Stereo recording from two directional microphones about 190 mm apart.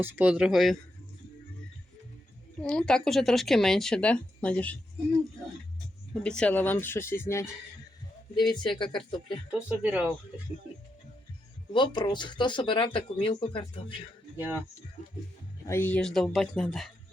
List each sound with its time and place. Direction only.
0.0 s speech: 10° right (ahead or behind)
2.6 s speech: 5° left (ahead or behind)
6.2 s speech: 5° left (ahead or behind); by 9.4 s 25° left (ahead or behind)
9.5 s speech: 5° right (ahead or behind)
11.7 s speech: 25° left (ahead or behind)
14.3 s speech: 10° right (ahead or behind)
15.6 s speech: 10° left (ahead or behind)